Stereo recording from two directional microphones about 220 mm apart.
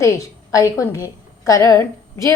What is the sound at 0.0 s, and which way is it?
A woman's voice, 15° left (ahead or behind).